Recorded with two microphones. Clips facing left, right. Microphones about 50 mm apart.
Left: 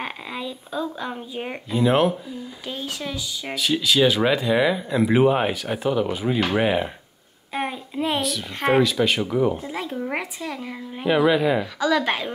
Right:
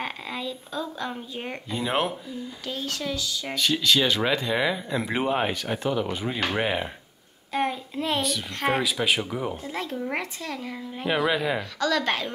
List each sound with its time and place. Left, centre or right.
0.0 s speech: centre
2.6 s speech: centre
3.5 s speech: centre
7.5 s a sound: centre
8.2 s speech: centre
8.8 s speech: centre
11.8 s speech: centre